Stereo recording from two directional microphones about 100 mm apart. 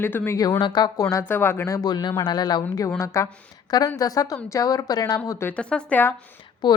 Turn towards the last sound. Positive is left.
turn(degrees=45)  # may be behind; listen again after turning